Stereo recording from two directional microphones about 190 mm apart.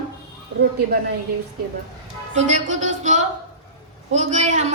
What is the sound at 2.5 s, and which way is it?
A woman's voice, 40° right (ahead or behind).